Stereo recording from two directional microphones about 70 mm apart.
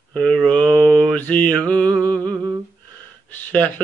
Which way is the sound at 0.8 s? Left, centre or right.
Centre.